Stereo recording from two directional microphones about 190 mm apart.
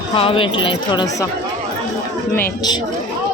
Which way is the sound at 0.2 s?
30° left (ahead or behind).